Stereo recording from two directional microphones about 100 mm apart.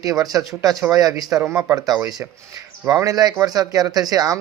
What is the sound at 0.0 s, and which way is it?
Speech, 35° right (ahead or behind).